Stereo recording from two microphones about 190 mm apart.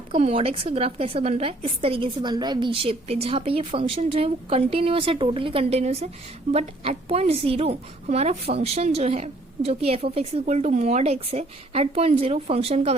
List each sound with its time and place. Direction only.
0.1 s a woman's voice: 30° right (ahead or behind)